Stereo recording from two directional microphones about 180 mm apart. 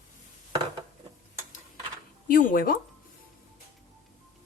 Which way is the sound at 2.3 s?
50° left (ahead or behind).